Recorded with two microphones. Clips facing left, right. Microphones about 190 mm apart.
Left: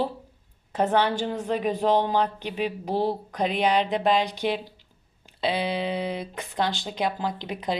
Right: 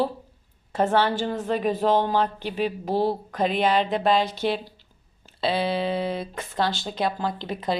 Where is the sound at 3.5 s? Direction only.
15° left (ahead or behind).